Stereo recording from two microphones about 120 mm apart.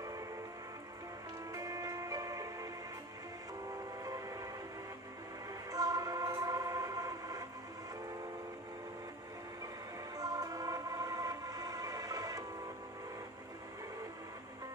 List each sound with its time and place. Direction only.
1.5 s music: 30° right (ahead or behind)
4.0 s music: 30° right (ahead or behind)
5.7 s music: 30° right (ahead or behind)
10.1 s music: 30° right (ahead or behind)